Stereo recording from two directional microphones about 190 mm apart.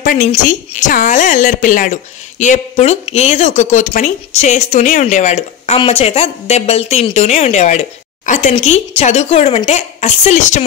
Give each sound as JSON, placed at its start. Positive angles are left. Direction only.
{"t": 0.0, "sound": "a woman's voice", "side_deg": 45}